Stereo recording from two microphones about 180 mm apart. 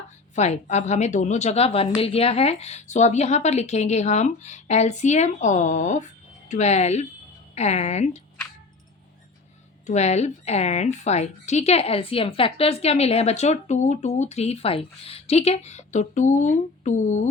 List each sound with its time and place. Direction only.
0.3 s a woman's voice: 40° left (ahead or behind)
9.8 s a woman's voice: 40° left (ahead or behind)